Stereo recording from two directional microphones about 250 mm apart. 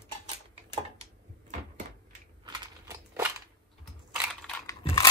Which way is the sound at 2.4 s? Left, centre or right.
Centre.